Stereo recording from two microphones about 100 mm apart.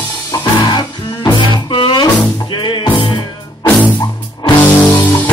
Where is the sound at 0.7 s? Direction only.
50° left (ahead or behind).